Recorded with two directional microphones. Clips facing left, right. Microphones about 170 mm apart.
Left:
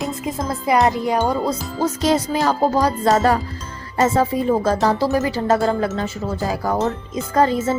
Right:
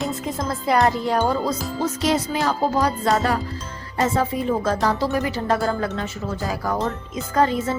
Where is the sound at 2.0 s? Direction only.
35° left (ahead or behind).